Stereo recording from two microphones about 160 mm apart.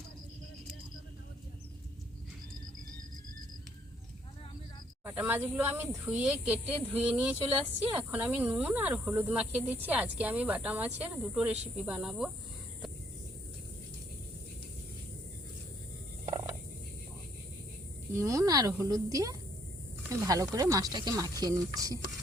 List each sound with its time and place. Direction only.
5.0 s speech: 10° right (ahead or behind)
18.2 s speech: 20° right (ahead or behind)